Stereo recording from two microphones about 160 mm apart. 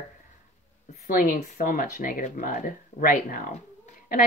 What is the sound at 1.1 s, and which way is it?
A woman's voice, 60° left (ahead or behind).